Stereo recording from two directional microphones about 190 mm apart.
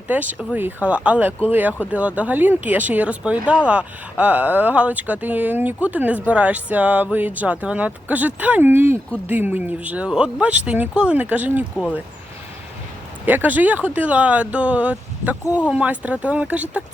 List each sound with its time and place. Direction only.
0.1 s speech: 10° right (ahead or behind)
13.2 s speech: 10° right (ahead or behind)